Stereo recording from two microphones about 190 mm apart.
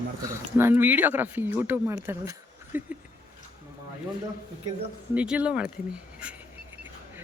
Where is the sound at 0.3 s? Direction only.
10° right (ahead or behind).